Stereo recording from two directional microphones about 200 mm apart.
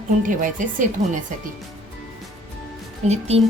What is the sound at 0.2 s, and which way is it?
A woman's voice, 40° right (ahead or behind).